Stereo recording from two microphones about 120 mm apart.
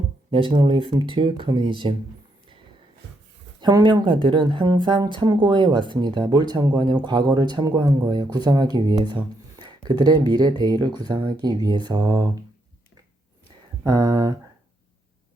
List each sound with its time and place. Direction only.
0.3 s speech: 45° right (ahead or behind)
3.6 s speech: 35° right (ahead or behind)
13.8 s speech: 30° right (ahead or behind)